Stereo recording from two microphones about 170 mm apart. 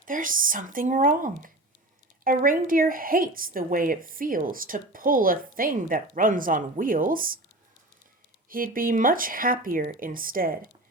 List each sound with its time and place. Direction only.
0.0 s a woman's voice: 55° right (ahead or behind)
8.4 s a woman's voice: 55° right (ahead or behind)